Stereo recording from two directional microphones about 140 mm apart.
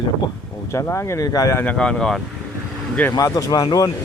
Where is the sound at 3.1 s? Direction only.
25° left (ahead or behind).